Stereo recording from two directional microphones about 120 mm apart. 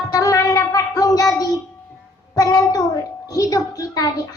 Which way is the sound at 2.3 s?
30° left (ahead or behind).